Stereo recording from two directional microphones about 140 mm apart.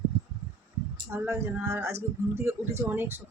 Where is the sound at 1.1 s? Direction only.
15° right (ahead or behind).